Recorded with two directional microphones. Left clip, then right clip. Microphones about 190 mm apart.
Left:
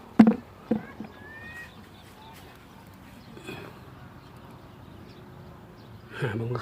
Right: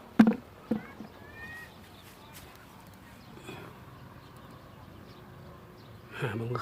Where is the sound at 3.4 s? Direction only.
20° left (ahead or behind).